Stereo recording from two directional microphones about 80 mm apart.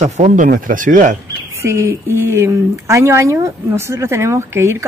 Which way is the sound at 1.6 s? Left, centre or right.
Right.